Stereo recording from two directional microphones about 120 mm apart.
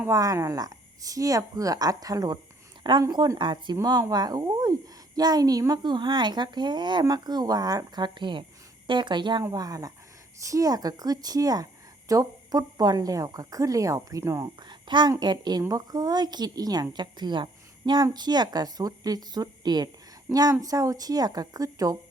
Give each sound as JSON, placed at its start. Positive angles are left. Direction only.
{"t": 0.1, "sound": "speech", "side_deg": -30}
{"t": 14.7, "sound": "a sound", "side_deg": -40}
{"t": 15.2, "sound": "speech", "side_deg": -35}